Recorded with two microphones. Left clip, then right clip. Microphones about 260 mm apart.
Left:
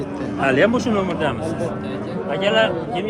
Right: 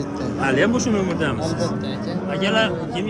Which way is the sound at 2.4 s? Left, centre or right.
Centre.